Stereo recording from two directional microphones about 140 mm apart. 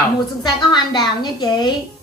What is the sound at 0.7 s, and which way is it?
Speech, 30° left (ahead or behind).